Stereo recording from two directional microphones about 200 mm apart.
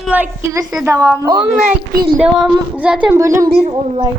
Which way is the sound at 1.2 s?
15° right (ahead or behind).